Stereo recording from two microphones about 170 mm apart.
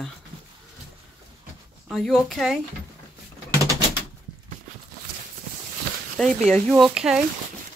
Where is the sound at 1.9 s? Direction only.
Centre (ahead or behind).